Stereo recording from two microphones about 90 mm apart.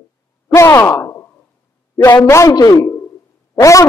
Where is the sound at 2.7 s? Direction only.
30° left (ahead or behind).